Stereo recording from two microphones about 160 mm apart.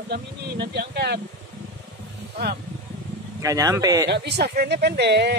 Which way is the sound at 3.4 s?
20° right (ahead or behind).